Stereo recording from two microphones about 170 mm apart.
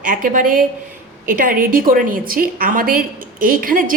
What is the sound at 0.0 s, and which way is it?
A woman's voice, 50° right (ahead or behind).